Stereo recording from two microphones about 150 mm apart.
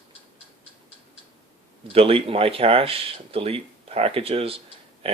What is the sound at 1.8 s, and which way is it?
Speech, 40° right (ahead or behind).